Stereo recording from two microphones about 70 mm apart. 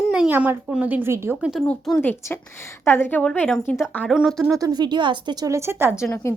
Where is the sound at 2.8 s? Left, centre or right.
Left.